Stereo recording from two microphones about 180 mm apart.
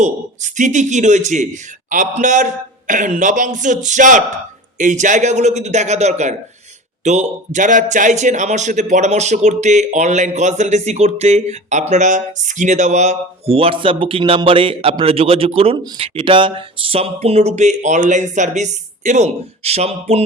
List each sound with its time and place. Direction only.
0.0 s a man's voice: 45° right (ahead or behind)